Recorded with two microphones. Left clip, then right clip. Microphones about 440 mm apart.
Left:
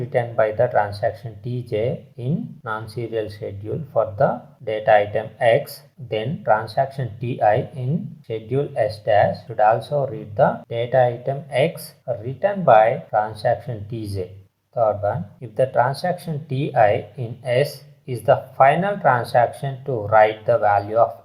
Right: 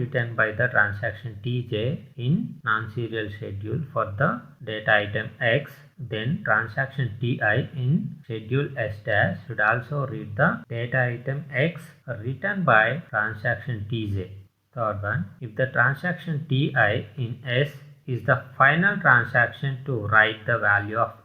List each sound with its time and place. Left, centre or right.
0.0 s speech: left
14.8 s speech: centre